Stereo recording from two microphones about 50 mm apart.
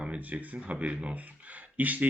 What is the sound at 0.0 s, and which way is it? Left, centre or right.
Speech, right.